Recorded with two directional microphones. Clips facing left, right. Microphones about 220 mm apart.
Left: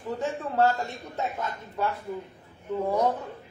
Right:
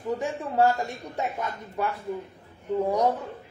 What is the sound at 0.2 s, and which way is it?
A man's voice, 15° right (ahead or behind).